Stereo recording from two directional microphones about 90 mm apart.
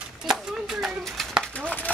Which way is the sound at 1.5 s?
15° left (ahead or behind).